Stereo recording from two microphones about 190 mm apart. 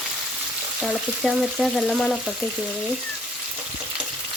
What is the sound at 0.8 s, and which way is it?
Frying, centre (ahead or behind).